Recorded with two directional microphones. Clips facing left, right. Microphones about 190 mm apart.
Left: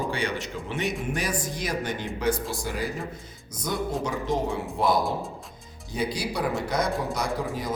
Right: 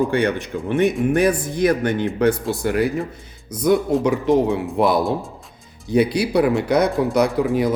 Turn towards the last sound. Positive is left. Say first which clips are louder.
# right 10 dB
turn(degrees=-65)  # may be behind; listen again after turning